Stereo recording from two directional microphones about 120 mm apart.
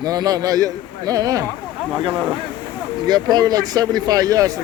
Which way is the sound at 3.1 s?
35° right (ahead or behind).